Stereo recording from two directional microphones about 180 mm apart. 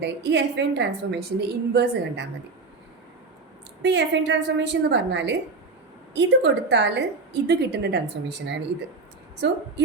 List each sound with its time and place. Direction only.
0.0 s a woman's voice: 75° right (ahead or behind)
3.8 s a woman's voice: 75° right (ahead or behind)
7.4 s a woman's voice: 65° right (ahead or behind)